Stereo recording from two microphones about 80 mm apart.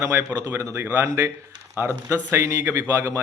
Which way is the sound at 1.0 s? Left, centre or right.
Right.